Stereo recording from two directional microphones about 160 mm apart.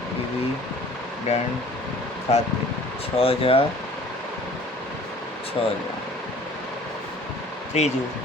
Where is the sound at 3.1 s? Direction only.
35° left (ahead or behind).